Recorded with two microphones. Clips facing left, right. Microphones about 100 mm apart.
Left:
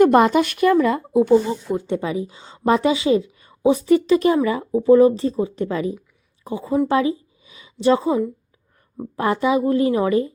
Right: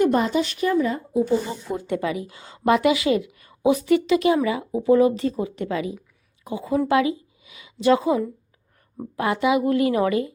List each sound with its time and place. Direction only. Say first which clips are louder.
0.0 s speech: left 6 dB; 65° left (ahead or behind)
1.7 s a woman's voice: left 1 dB; 25° left (ahead or behind)